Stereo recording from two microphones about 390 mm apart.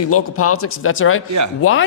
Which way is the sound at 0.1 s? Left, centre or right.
Left.